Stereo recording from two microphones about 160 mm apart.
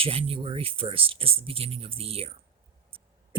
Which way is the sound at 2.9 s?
35° right (ahead or behind).